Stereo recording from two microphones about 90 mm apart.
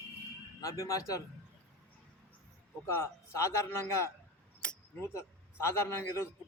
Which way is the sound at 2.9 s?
30° left (ahead or behind).